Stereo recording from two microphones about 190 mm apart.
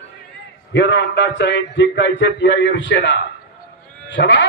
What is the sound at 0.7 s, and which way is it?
A man's voice, 65° left (ahead or behind).